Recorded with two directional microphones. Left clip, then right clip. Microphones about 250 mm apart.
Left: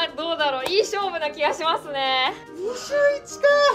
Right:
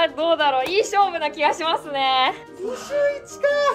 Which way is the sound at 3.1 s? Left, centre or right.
Left.